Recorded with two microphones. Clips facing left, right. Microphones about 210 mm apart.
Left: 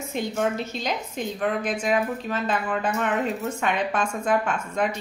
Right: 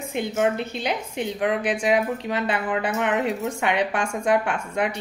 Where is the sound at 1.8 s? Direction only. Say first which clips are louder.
Right 2 dB; 15° right (ahead or behind).